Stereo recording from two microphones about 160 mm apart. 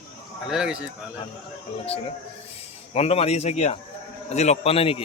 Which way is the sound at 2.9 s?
40° left (ahead or behind).